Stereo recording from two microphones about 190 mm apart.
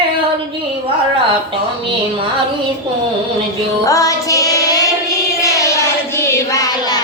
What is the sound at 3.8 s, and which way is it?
Music, 15° left (ahead or behind).